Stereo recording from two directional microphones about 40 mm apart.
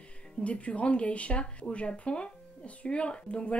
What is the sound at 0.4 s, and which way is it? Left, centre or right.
Speech, left.